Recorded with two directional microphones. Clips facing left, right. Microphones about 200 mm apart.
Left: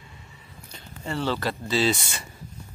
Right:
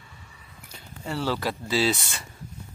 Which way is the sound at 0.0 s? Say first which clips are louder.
Left 2 dB; 20° left (ahead or behind).